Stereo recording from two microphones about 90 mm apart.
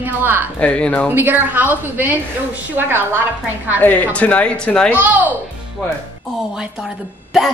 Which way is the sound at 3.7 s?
20° left (ahead or behind).